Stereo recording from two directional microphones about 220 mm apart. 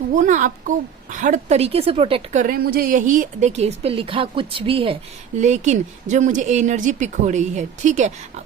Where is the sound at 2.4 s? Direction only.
40° right (ahead or behind).